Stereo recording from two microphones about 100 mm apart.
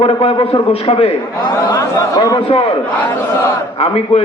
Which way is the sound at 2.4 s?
70° left (ahead or behind).